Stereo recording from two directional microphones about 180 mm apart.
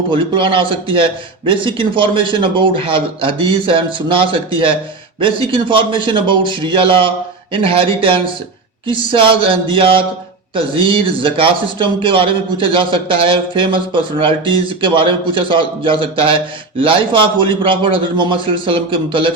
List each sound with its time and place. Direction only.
0.1 s a man's voice: 30° right (ahead or behind)